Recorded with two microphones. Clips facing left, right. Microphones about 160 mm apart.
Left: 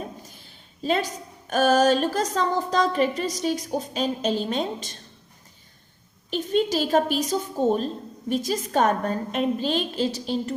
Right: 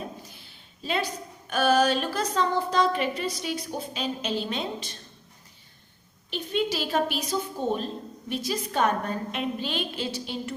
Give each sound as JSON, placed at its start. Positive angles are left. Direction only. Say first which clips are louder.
{"t": 0.3, "sound": "a woman's voice", "louder": "left 1 dB", "side_deg": 40}
{"t": 6.3, "sound": "a woman's voice", "louder": "left 5 dB", "side_deg": 45}